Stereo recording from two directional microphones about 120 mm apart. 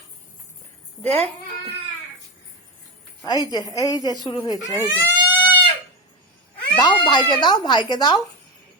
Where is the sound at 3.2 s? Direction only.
35° left (ahead or behind).